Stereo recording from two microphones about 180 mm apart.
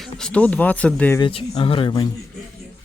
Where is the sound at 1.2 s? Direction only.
30° left (ahead or behind).